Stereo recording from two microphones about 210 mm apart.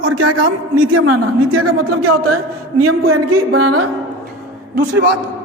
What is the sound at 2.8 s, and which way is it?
Speech, 85° right.